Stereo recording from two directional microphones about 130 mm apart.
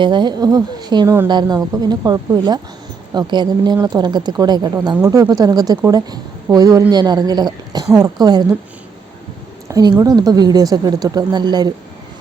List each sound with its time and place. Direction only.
0.0 s a woman's voice: 35° right (ahead or behind)
9.6 s a woman's voice: 25° right (ahead or behind)